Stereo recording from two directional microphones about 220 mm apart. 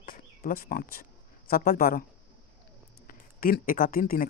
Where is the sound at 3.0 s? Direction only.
40° left (ahead or behind).